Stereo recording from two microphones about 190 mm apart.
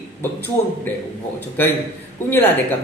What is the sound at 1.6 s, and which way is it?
Speech, 10° left (ahead or behind).